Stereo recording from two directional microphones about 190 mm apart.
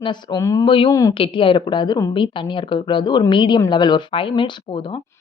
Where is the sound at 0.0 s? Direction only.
25° left (ahead or behind).